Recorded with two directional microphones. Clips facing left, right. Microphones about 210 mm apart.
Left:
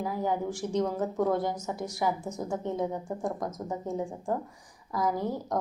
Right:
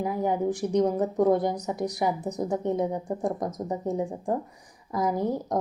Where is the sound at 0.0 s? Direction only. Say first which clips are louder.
Right 4 dB; 20° right (ahead or behind).